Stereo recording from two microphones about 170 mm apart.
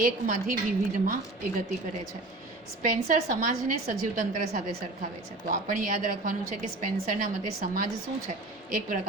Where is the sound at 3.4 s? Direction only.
50° right (ahead or behind).